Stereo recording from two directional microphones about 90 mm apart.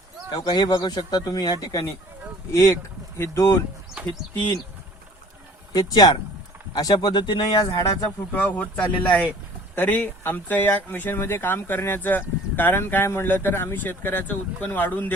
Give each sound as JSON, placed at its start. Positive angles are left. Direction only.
{"t": 0.3, "sound": "speech", "side_deg": 50}
{"t": 2.5, "sound": "speech", "side_deg": 35}
{"t": 4.0, "sound": "bird", "side_deg": -15}
{"t": 5.7, "sound": "speech", "side_deg": 50}
{"t": 8.3, "sound": "speech", "side_deg": 20}